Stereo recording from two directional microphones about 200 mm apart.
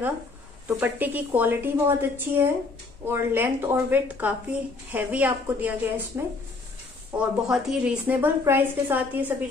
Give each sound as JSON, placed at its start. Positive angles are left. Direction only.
{"t": 0.7, "sound": "speech", "side_deg": -10}